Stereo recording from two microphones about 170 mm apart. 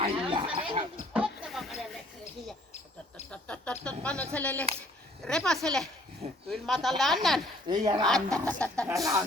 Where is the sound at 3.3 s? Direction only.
10° left (ahead or behind).